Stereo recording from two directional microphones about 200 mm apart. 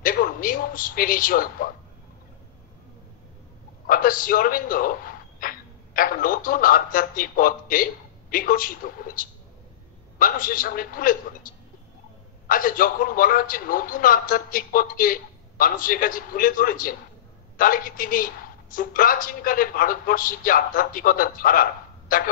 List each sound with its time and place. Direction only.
0.0 s a man's voice: 45° left (ahead or behind)
3.8 s a woman's voice: 45° left (ahead or behind)